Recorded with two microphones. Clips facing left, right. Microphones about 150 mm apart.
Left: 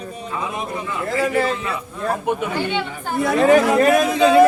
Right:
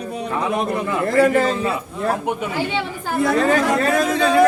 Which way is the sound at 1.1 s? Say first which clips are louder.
Right 4 dB; 55° right (ahead or behind).